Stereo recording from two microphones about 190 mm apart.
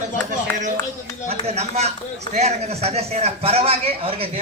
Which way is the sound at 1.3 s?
35° right (ahead or behind).